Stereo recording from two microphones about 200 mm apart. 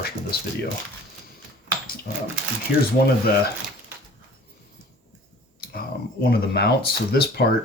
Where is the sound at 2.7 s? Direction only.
60° left (ahead or behind).